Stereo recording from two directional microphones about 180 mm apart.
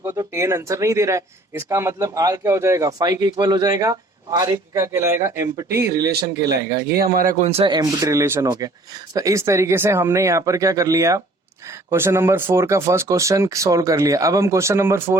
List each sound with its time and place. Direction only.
0.0 s speech: 20° right (ahead or behind)
6.9 s speech: 55° right (ahead or behind)
7.6 s speech: 20° right (ahead or behind)